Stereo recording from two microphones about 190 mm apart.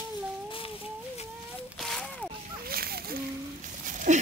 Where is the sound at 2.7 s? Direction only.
50° right (ahead or behind).